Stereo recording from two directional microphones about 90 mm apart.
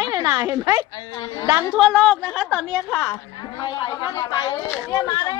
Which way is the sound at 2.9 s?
15° left (ahead or behind).